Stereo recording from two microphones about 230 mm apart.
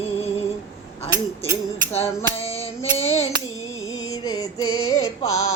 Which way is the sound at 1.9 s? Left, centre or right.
Left.